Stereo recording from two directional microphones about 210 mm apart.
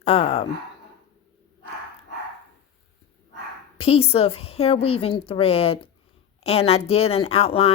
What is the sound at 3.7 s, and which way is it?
Speech, 30° left (ahead or behind).